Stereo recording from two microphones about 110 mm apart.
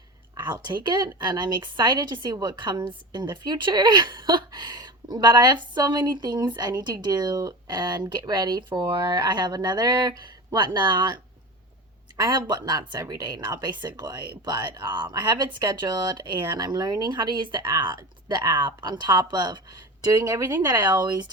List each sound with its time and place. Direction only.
0.3 s speech: 40° right (ahead or behind)